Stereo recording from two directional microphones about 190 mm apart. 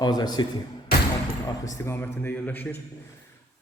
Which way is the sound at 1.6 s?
15° left (ahead or behind).